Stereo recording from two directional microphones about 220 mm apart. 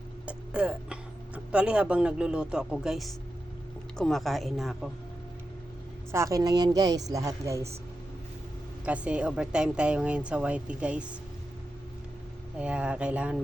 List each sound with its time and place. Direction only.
0.3 s a sound: 5° right (ahead or behind)
1.5 s a woman's voice: 5° right (ahead or behind)
6.1 s speech: 15° right (ahead or behind)
8.8 s a woman's voice: 5° right (ahead or behind)
12.5 s a woman's voice: 5° right (ahead or behind)